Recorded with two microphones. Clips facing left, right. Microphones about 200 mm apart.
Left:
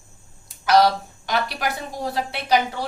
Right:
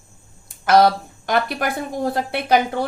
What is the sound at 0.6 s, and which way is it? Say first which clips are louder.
A woman's voice: right 2 dB; 55° right (ahead or behind).